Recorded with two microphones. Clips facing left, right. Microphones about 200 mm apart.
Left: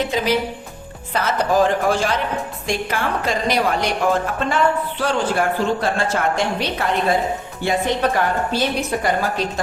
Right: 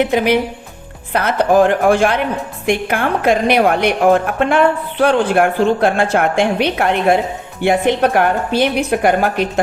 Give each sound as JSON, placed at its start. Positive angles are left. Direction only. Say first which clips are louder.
{"t": 0.0, "sound": "a woman's voice", "louder": "right 6 dB", "side_deg": -60}